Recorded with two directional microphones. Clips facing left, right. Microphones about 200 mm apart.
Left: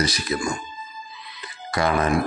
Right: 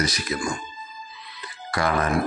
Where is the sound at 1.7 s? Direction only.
20° left (ahead or behind).